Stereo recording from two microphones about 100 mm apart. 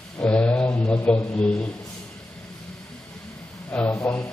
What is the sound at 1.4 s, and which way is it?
Speech, 10° left (ahead or behind).